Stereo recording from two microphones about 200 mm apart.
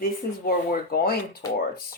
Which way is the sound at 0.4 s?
50° left (ahead or behind).